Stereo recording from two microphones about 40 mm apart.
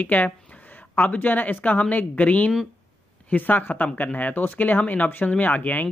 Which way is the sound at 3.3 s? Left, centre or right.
Left.